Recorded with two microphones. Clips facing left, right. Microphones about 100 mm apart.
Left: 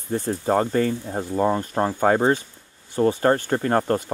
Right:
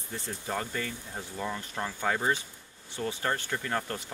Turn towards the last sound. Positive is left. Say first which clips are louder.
# left 12 dB
turn(degrees=50)  # may be behind; listen again after turning